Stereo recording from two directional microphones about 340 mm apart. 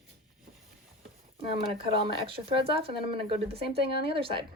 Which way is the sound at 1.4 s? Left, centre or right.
Centre.